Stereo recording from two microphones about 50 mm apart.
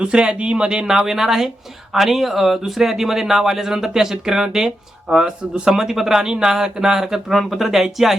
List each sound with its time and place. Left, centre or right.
0.0 s speech: right; by 8.1 s centre